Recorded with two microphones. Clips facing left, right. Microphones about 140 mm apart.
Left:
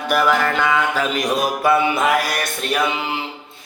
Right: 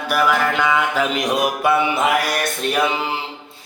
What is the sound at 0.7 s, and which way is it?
Mantra, 15° right (ahead or behind).